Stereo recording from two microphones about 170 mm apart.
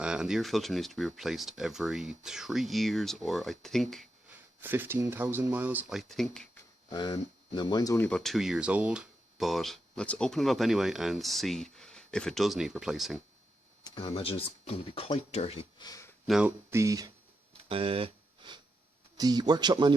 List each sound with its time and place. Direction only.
0.0 s speech: 5° right (ahead or behind)
4.6 s speech: 10° right (ahead or behind); by 6.6 s 5° left (ahead or behind)
6.9 s speech: 25° left (ahead or behind)
8.0 s speech: 5° left (ahead or behind)
13.8 s speech: 30° left (ahead or behind)
15.8 s speech: 20° left (ahead or behind)
16.2 s speech: centre (ahead or behind)
16.6 s speech: 15° right (ahead or behind)
17.6 s a sound: 35° right (ahead or behind)
19.1 s speech: 25° right (ahead or behind)